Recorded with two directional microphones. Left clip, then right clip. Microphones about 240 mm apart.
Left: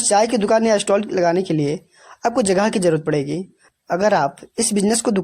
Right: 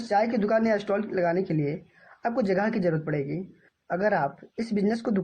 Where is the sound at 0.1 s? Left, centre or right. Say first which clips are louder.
Left 8 dB; left.